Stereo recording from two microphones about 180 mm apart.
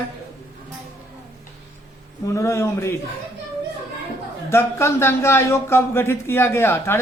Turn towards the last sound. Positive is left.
turn(degrees=15)  # may be behind; listen again after turning